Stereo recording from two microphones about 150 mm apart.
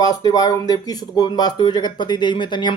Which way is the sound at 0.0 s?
25° left (ahead or behind).